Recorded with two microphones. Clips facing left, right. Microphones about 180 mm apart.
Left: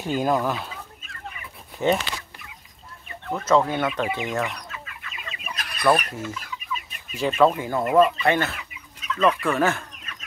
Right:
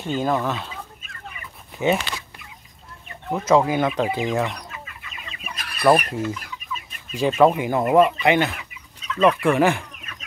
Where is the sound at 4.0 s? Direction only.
35° right (ahead or behind).